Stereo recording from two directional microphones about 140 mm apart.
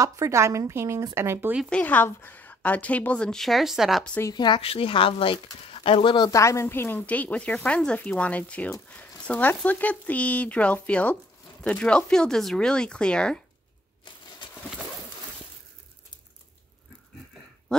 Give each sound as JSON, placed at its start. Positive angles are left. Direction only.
{"t": 0.0, "sound": "speech", "side_deg": -20}
{"t": 1.7, "sound": "speech", "side_deg": 10}
{"t": 4.3, "sound": "speech", "side_deg": 35}